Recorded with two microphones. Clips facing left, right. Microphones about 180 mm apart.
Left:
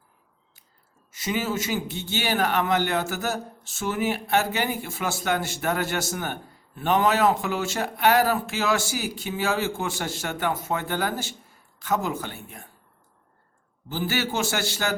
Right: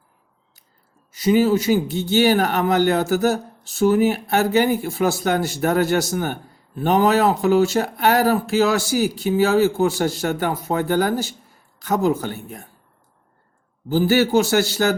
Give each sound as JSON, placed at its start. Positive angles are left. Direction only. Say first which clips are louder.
{"t": 1.1, "sound": "a man's voice", "louder": "right 11 dB", "side_deg": -35}
{"t": 13.8, "sound": "a man's voice", "louder": "right 11 dB", "side_deg": -40}